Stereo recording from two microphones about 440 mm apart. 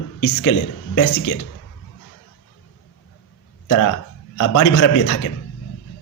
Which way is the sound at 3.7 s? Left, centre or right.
Left.